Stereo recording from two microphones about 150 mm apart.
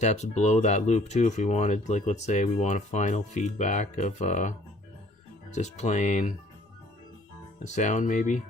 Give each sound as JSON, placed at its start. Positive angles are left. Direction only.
{"t": 0.0, "sound": "speech", "side_deg": 50}
{"t": 7.6, "sound": "speech", "side_deg": 50}